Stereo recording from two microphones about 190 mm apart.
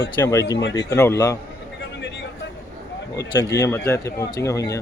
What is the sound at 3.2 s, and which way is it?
Speech, 15° left (ahead or behind).